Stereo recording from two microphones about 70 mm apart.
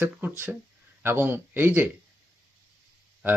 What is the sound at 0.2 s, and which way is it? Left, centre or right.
Speech, right.